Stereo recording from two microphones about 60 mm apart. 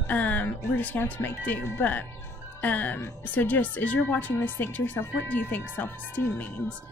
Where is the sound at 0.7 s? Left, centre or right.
Left.